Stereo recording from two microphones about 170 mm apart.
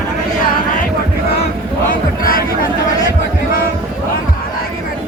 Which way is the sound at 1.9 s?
55° left (ahead or behind).